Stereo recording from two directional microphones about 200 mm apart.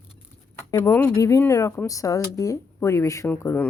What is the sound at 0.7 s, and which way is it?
A woman's voice, 15° left (ahead or behind).